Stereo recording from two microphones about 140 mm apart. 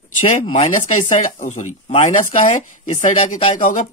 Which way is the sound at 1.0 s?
65° left (ahead or behind).